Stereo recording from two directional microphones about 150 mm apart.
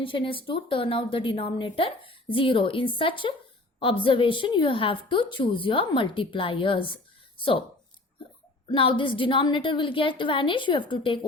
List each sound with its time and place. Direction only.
0.0 s a woman's voice: 35° left (ahead or behind)
8.7 s a woman's voice: 35° left (ahead or behind)